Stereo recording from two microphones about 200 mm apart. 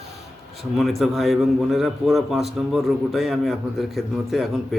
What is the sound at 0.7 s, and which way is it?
A man's voice, centre (ahead or behind).